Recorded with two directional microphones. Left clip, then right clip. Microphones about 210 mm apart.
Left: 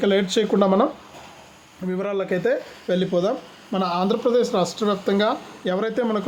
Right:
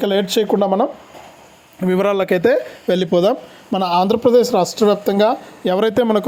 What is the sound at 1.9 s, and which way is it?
Speech, 45° right (ahead or behind).